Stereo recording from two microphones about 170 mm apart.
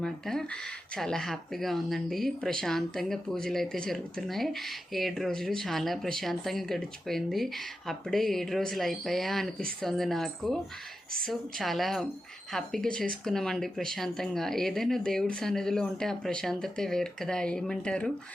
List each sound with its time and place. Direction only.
0.0 s speech: 5° left (ahead or behind)